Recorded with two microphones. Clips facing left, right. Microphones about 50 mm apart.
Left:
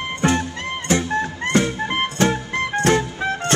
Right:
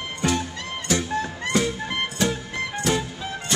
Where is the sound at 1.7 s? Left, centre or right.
Left.